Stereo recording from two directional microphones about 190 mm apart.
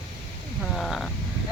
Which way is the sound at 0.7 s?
Centre (ahead or behind).